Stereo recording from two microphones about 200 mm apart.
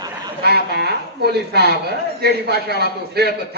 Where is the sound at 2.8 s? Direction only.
50° right (ahead or behind).